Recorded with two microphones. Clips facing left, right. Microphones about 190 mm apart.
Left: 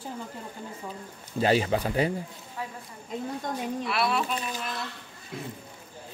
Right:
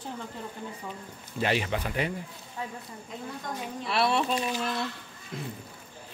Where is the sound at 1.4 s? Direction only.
35° left (ahead or behind).